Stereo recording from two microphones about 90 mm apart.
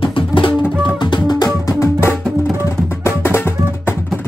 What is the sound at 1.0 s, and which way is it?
Music, 50° left (ahead or behind).